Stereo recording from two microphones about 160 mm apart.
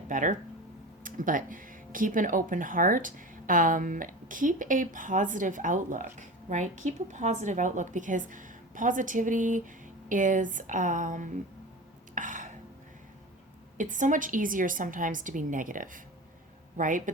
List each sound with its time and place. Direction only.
0.1 s speech: 55° right (ahead or behind)
12.1 s a sound: 55° right (ahead or behind)
13.7 s speech: 50° right (ahead or behind)